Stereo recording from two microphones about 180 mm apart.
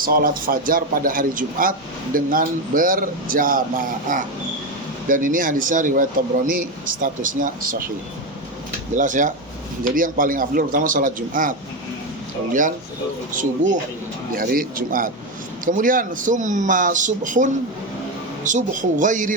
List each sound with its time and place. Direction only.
0.0 s speech: 55° right (ahead or behind)
9.0 s speech: 45° right (ahead or behind)
13.3 s speech: 45° right (ahead or behind)